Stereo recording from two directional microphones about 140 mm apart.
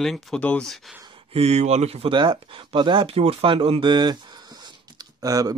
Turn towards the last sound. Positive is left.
turn(degrees=-25)  # may be behind; listen again after turning